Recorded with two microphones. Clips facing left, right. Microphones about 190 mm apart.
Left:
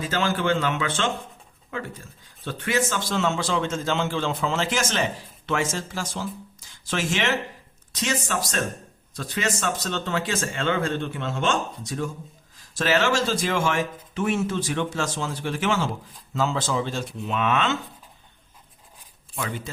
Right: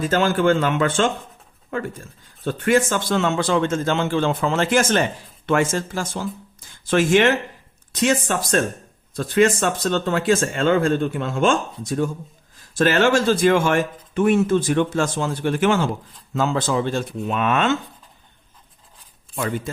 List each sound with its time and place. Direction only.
0.0 s speech: 50° right (ahead or behind)
2.4 s speech: 50° right (ahead or behind)
19.4 s speech: 50° right (ahead or behind)